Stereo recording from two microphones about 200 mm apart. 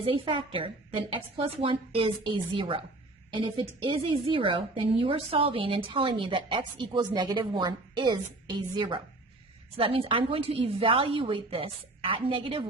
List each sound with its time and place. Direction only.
0.0 s a woman's voice: 25° right (ahead or behind)